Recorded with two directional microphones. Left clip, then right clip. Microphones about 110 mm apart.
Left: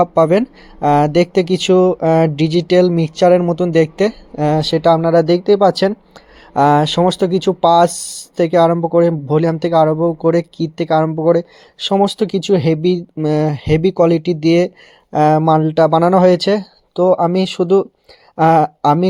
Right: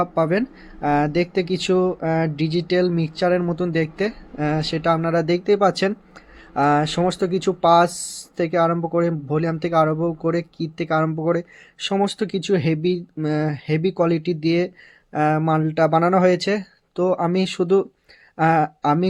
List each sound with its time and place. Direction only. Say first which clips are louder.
0.0 s speech: left 8 dB; 80° left; by 4.9 s 60° left (ahead or behind)
4.9 s speech: left 8 dB; 50° left (ahead or behind)
6.5 s speech: left 7 dB; 60° left (ahead or behind)
18.3 s speech: left 7 dB; 65° left (ahead or behind)